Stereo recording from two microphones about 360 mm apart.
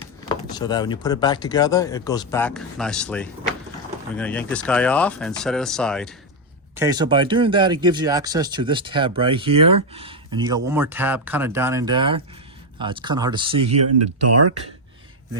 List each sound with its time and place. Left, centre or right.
0.5 s speech: centre
6.7 s speech: centre
14.2 s speech: right